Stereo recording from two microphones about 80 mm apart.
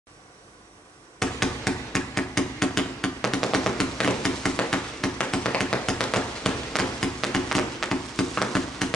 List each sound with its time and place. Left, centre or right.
1.2 s hammer: centre